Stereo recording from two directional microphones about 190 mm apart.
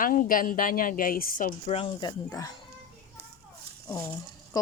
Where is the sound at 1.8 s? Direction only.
25° left (ahead or behind).